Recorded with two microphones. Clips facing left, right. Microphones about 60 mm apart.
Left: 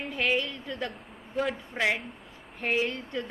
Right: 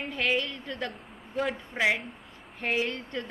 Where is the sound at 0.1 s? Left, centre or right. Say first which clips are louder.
Left 1 dB; centre.